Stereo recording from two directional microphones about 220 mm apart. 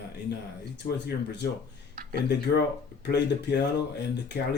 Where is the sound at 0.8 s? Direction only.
50° left (ahead or behind).